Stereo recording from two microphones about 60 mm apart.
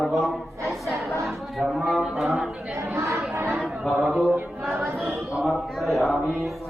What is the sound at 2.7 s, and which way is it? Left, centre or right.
Chatter, right.